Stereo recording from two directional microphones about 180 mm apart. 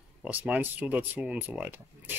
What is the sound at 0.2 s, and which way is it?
Speech, 10° right (ahead or behind).